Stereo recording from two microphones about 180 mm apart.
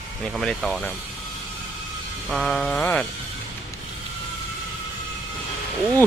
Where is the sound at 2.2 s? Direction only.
Centre (ahead or behind).